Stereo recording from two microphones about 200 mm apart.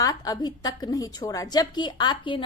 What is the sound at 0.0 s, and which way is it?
A woman's voice, 20° left (ahead or behind).